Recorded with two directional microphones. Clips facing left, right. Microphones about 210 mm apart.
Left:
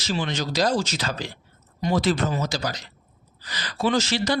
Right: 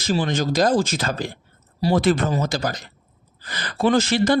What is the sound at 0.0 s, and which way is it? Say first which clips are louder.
A man's voice: right 5 dB; 45° right (ahead or behind).